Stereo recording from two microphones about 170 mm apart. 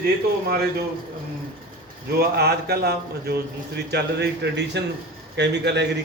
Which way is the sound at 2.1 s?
65° right (ahead or behind).